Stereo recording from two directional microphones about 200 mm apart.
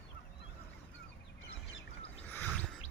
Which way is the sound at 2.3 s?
10° left (ahead or behind).